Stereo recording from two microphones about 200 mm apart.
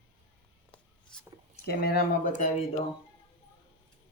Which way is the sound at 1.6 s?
50° left (ahead or behind).